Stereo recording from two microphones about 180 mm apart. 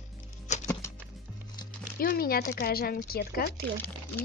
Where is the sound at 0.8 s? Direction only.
15° left (ahead or behind).